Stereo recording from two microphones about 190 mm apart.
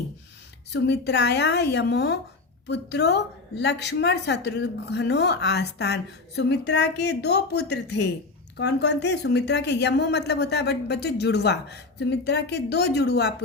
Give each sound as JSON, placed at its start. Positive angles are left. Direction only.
{"t": 0.7, "sound": "a woman's voice", "side_deg": 65}